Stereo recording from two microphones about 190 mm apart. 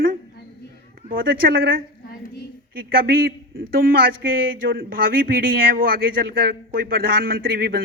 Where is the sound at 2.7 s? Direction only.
50° right (ahead or behind).